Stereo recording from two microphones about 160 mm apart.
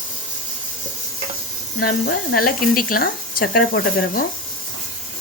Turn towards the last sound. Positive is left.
turn(degrees=60)  # may be behind; listen again after turning